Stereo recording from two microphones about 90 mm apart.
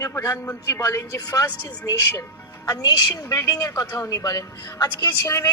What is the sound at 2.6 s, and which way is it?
A woman's voice, 45° left (ahead or behind).